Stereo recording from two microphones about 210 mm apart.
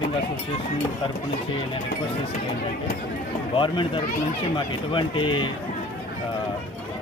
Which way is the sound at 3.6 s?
25° left (ahead or behind).